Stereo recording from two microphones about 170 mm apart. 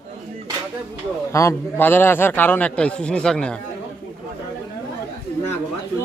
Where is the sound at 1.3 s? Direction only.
20° left (ahead or behind).